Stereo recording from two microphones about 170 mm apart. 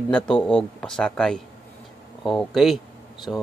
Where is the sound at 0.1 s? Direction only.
5° left (ahead or behind).